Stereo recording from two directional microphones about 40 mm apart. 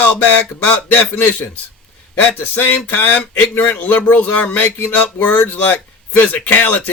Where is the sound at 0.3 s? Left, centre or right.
Left.